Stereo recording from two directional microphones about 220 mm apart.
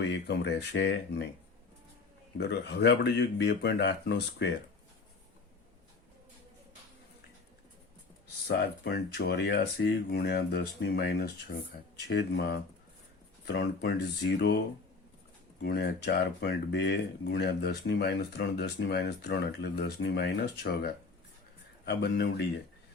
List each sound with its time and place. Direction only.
0.3 s speech: 50° left (ahead or behind)
2.4 s speech: 50° left (ahead or behind)
8.4 s speech: 50° left (ahead or behind)
15.6 s speech: 50° left (ahead or behind)